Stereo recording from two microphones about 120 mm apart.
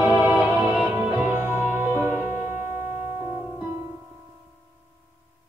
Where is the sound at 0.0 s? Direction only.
15° right (ahead or behind).